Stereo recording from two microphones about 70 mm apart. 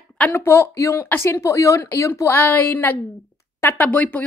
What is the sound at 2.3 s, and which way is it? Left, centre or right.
Speech, left.